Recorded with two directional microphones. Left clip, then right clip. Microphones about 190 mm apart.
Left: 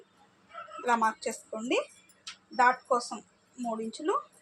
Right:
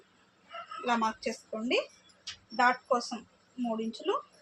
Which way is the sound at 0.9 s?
35° left (ahead or behind).